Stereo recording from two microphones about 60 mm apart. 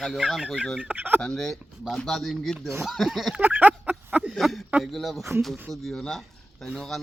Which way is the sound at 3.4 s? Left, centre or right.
Right.